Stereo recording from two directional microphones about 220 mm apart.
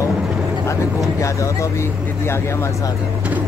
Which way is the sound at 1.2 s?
15° left (ahead or behind).